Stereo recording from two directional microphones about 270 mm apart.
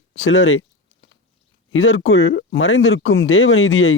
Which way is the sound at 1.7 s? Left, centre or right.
Left.